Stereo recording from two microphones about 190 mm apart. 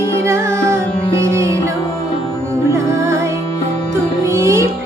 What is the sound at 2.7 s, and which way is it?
Music, 15° right (ahead or behind).